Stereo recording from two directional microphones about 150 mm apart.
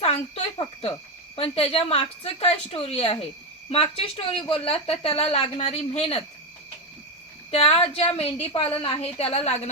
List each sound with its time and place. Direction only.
0.0 s a woman's voice: 40° left (ahead or behind)
7.5 s a woman's voice: 40° left (ahead or behind)